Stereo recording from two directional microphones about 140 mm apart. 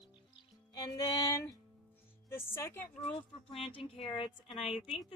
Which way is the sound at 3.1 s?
45° left (ahead or behind).